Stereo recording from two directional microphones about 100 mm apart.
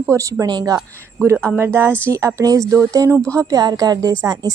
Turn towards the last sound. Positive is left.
turn(degrees=-35)  # may be behind; listen again after turning